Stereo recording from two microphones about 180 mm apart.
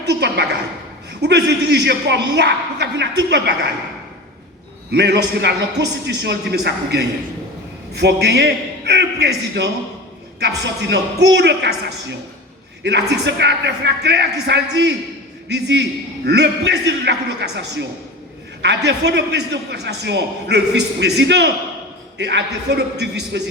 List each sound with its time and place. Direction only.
0.0 s a sound: 70° right (ahead or behind)
1.2 s a man's voice: 70° right (ahead or behind)
4.9 s a man's voice: 70° right (ahead or behind)
10.8 s a man's voice: 70° right (ahead or behind)
12.8 s a man's voice: 70° right (ahead or behind)